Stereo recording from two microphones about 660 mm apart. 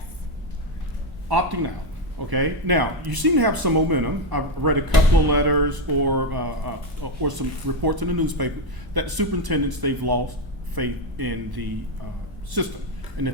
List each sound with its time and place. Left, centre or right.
1.3 s speech: right